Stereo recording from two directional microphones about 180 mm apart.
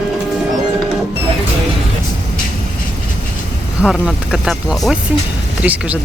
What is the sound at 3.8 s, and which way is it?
Speech, 5° right (ahead or behind).